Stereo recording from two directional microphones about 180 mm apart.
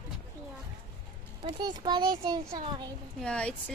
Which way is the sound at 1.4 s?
25° right (ahead or behind).